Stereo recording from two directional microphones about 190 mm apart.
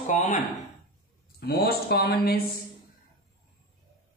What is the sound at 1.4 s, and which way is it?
Speech, 55° left (ahead or behind).